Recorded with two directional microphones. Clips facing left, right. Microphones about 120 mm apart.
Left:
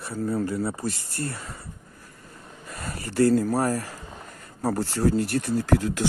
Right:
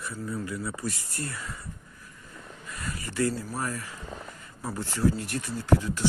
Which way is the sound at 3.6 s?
40° left (ahead or behind).